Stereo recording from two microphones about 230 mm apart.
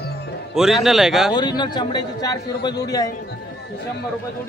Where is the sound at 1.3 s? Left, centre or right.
Centre.